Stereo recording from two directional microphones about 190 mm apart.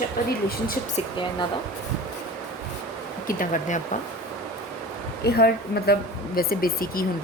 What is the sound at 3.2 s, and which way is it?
Speech, 45° left (ahead or behind).